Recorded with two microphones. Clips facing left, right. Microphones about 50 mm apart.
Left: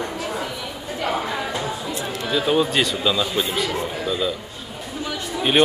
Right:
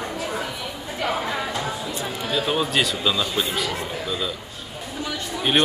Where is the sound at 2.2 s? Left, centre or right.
Centre.